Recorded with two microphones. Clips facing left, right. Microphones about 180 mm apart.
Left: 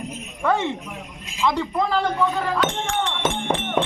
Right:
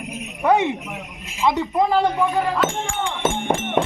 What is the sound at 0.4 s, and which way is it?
Speech, 15° right (ahead or behind).